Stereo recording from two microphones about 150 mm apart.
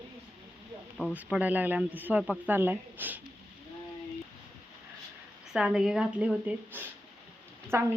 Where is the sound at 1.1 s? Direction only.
10° right (ahead or behind).